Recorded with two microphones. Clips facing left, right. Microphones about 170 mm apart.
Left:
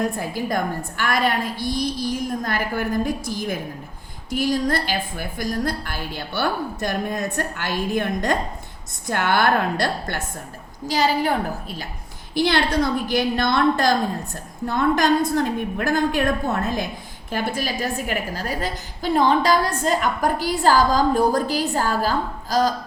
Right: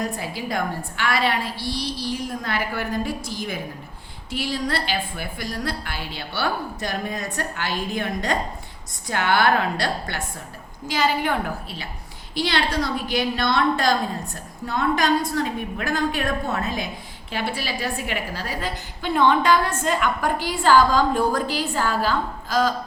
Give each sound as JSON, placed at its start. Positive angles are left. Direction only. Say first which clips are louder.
{"t": 0.0, "sound": "a woman's voice", "louder": "left 4 dB", "side_deg": 50}
{"t": 10.8, "sound": "a woman's voice", "louder": "left 2 dB", "side_deg": 40}